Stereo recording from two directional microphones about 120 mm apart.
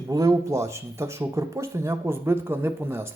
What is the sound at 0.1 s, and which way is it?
Speech, 30° right (ahead or behind).